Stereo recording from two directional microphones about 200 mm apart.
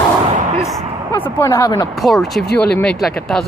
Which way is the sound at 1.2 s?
15° left (ahead or behind).